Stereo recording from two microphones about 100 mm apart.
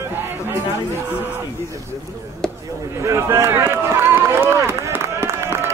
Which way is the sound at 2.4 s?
5° left (ahead or behind).